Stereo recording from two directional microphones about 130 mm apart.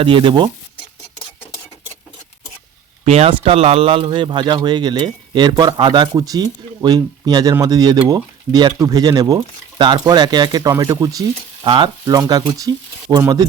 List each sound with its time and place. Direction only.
0.0 s speech: 40° right (ahead or behind)
3.0 s speech: 55° right (ahead or behind); by 13.5 s 25° right (ahead or behind)